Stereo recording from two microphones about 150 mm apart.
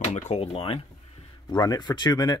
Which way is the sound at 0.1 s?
45° left (ahead or behind).